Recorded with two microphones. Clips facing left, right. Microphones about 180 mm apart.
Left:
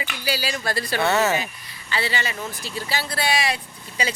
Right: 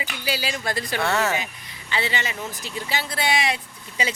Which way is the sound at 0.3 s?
20° right (ahead or behind).